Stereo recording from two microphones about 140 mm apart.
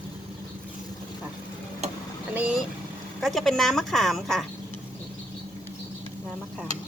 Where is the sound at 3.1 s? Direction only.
Centre (ahead or behind).